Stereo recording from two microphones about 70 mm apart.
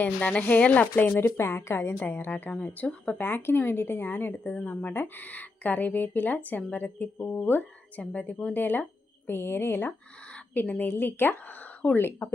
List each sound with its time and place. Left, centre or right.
0.0 s speech: left
1.4 s a woman's voice: left
11.9 s a woman's voice: left